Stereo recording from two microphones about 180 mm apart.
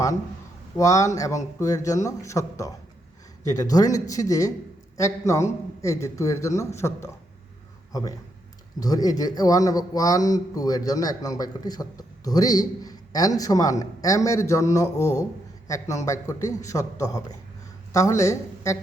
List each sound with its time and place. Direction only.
0.8 s a man's voice: 15° left (ahead or behind)
8.8 s a man's voice: 20° left (ahead or behind)